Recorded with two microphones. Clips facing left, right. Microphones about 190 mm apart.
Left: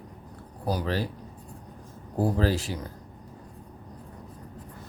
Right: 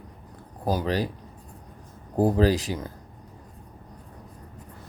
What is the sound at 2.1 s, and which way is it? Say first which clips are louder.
Speech: right 4 dB; 15° right (ahead or behind).